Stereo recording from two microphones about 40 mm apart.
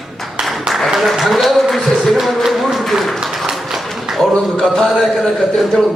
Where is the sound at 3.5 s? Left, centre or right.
Centre.